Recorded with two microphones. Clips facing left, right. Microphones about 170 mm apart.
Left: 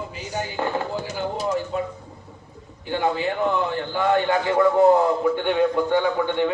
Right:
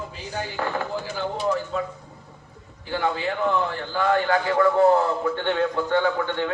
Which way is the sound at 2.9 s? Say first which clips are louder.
Left 2 dB; 20° left (ahead or behind).